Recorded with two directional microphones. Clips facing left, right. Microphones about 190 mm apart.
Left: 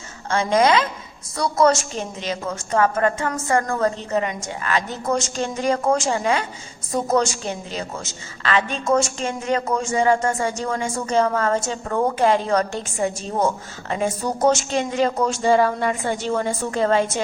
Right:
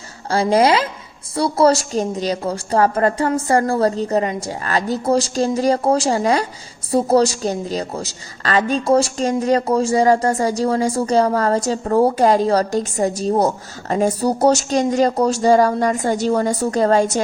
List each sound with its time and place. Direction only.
0.3 s a woman's voice: 35° right (ahead or behind)